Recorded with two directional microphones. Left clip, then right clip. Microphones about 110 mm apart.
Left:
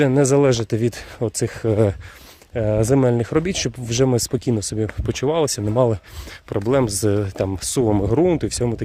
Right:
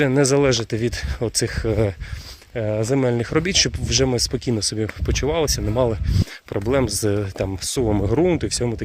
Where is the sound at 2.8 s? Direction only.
75° left (ahead or behind).